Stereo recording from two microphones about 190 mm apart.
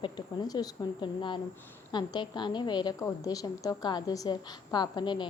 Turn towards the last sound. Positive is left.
turn(degrees=25)  # may be behind; listen again after turning